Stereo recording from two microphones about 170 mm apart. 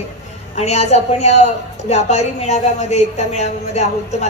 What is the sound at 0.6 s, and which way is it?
A woman's voice, 40° left (ahead or behind).